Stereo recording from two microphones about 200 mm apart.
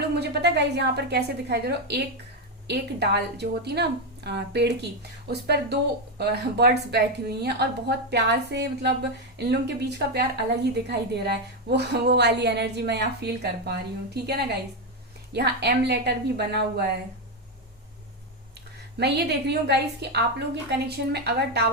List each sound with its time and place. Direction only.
0.1 s speech: 55° right (ahead or behind)
18.9 s speech: 55° right (ahead or behind)